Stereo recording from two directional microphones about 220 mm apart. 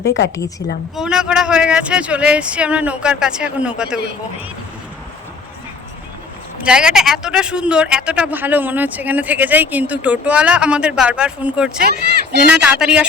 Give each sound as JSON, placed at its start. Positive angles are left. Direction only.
{"t": 0.9, "sound": "speech", "side_deg": -5}
{"t": 6.7, "sound": "speech", "side_deg": -5}
{"t": 11.8, "sound": "speech", "side_deg": -45}
{"t": 12.4, "sound": "speech", "side_deg": -5}